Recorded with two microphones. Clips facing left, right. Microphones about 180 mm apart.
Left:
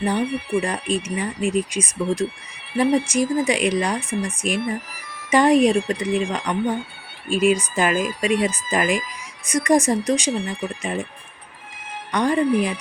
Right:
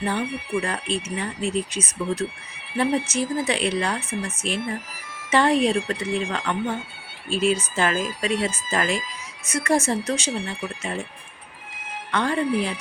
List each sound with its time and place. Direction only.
0.0 s speech: 15° left (ahead or behind)
0.3 s speech: 60° left (ahead or behind)
0.6 s speech: 15° left (ahead or behind)
12.1 s speech: 15° left (ahead or behind)